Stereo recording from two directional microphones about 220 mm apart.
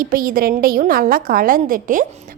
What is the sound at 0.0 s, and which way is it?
A woman's voice, 40° right (ahead or behind).